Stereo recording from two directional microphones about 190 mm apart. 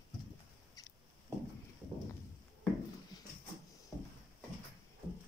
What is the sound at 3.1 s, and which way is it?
Dog, 20° left (ahead or behind).